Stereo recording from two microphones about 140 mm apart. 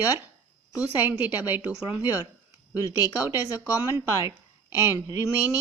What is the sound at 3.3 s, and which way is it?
A woman's voice, 15° right (ahead or behind).